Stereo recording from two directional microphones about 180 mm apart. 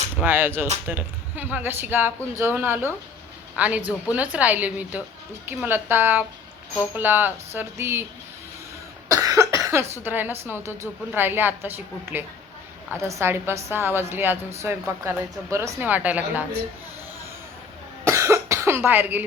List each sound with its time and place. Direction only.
0.2 s speech: 10° right (ahead or behind)
9.0 s speech: 20° right (ahead or behind)
18.0 s cough: 15° right (ahead or behind)